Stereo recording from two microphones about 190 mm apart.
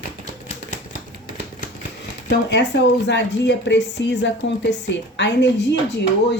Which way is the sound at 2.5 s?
65° left (ahead or behind).